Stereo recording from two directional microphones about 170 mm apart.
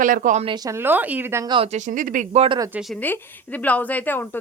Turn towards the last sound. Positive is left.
turn(degrees=10)  # may be behind; listen again after turning